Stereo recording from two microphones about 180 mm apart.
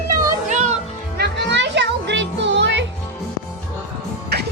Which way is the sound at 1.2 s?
75° right (ahead or behind).